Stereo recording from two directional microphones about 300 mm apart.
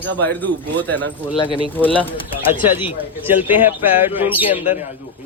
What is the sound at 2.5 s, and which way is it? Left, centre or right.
A man's voice, centre.